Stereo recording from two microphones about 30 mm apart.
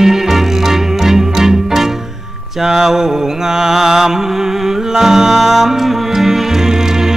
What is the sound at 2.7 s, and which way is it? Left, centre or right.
Mantra, centre.